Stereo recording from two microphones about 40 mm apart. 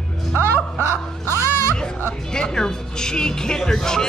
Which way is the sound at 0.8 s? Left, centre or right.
Left.